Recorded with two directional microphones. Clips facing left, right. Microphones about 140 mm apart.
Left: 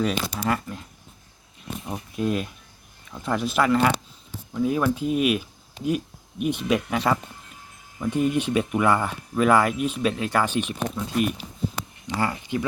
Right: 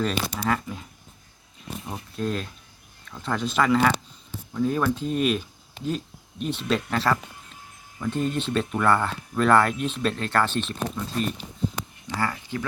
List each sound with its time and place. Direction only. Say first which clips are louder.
0.0 s speech: left 1 dB; 10° left (ahead or behind)
2.1 s speech: left 3 dB; 10° left (ahead or behind)